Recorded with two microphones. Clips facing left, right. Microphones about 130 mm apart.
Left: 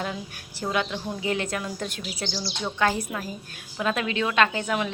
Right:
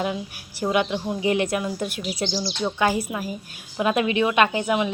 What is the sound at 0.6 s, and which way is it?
A woman's voice, 15° right (ahead or behind).